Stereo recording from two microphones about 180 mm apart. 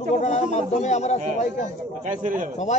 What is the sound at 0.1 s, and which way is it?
A man's voice, 40° left (ahead or behind).